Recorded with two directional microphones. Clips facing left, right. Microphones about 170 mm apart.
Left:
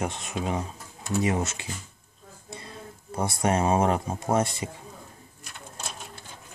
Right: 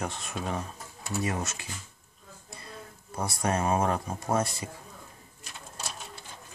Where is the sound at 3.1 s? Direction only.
25° left (ahead or behind).